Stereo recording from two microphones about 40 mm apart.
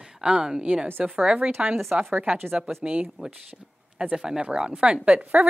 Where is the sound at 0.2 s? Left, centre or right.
Right.